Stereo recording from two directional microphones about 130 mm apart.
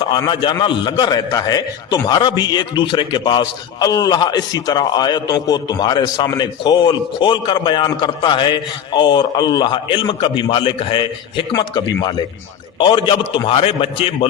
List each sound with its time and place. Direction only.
0.6 s a man's voice: 40° left (ahead or behind)